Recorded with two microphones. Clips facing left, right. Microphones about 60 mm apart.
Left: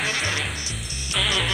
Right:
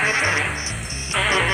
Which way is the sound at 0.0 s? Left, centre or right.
Right.